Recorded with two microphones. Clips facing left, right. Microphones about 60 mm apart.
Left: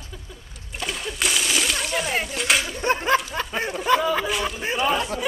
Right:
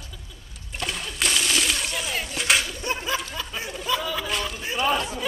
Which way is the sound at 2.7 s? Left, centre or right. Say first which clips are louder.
Left 7 dB; left.